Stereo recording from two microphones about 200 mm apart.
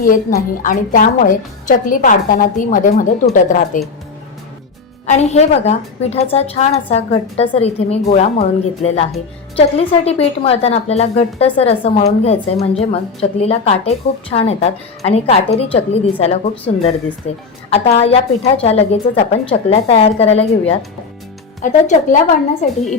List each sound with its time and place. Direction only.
0.0 s a woman's voice: 45° left (ahead or behind)
5.0 s a woman's voice: 35° left (ahead or behind)